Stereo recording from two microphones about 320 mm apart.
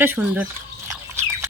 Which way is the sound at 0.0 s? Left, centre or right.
Centre.